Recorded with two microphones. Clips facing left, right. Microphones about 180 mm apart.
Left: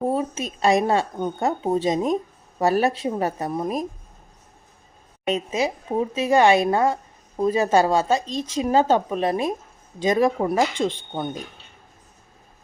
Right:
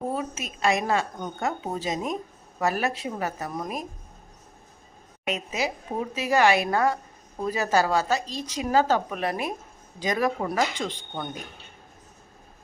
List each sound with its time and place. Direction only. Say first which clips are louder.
0.1 s a woman's voice: left 6 dB; 30° left (ahead or behind)
5.2 s speech: left 5 dB; 30° left (ahead or behind)